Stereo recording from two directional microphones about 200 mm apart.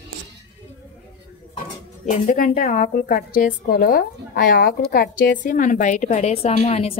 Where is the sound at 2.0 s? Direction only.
40° left (ahead or behind).